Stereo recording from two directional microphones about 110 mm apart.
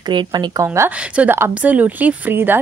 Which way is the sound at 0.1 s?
45° right (ahead or behind).